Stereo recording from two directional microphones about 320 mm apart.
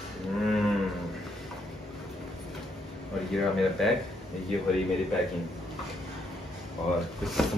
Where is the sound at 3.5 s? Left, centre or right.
Centre.